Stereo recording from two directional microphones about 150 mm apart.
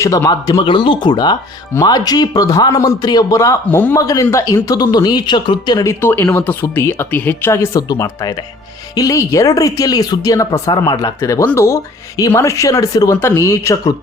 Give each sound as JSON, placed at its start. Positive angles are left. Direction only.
{"t": 0.0, "sound": "speech", "side_deg": 20}
{"t": 4.0, "sound": "speech", "side_deg": 25}